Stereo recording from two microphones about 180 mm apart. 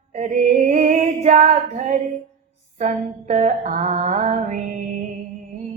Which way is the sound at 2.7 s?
40° right (ahead or behind).